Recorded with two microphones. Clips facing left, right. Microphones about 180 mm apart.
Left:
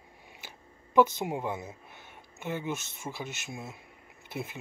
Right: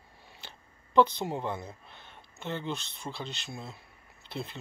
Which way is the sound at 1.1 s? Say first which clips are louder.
Left 1 dB; 10° left (ahead or behind).